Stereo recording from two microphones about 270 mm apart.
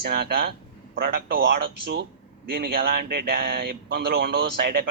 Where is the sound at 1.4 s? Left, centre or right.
Right.